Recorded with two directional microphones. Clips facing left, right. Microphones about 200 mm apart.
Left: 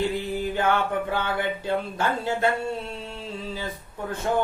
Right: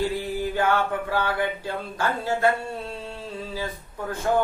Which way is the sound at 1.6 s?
20° left (ahead or behind).